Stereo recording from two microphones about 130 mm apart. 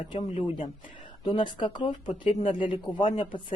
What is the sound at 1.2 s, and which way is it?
A woman's voice, 40° left (ahead or behind).